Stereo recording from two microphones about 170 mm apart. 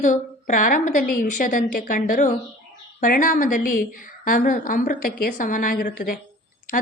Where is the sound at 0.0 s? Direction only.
50° left (ahead or behind).